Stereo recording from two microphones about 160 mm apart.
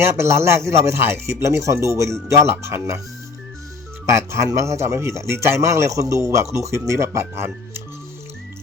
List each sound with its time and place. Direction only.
0.0 s a man's voice: 15° right (ahead or behind)
4.1 s a man's voice: 15° right (ahead or behind)